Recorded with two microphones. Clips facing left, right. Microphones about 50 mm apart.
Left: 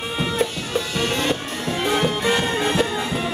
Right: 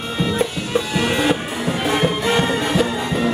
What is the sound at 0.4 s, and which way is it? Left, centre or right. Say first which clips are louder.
Music: right 3 dB; centre.